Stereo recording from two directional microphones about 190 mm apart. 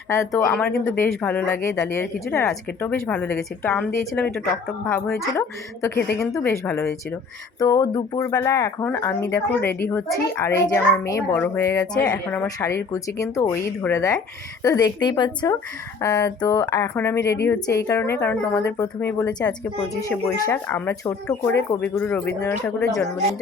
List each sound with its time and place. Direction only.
0.1 s a woman's voice: 15° left (ahead or behind)